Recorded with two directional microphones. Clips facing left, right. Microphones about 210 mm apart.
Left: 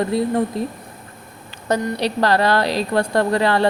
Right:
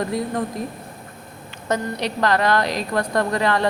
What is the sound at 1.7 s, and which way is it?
A woman's voice, 35° left (ahead or behind).